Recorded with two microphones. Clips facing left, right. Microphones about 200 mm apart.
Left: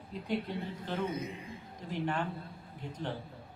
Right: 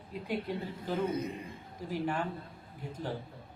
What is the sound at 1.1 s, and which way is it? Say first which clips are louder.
Speech: right 3 dB; 60° right (ahead or behind).